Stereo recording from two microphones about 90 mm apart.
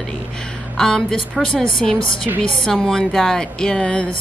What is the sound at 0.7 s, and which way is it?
Speech, 5° left (ahead or behind).